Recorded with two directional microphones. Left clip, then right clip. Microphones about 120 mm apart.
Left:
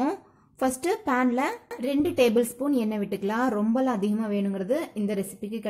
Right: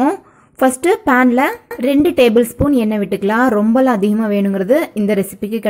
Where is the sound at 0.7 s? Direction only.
35° right (ahead or behind).